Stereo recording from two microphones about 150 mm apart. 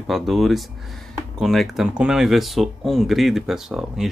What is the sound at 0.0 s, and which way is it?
Speech, centre (ahead or behind).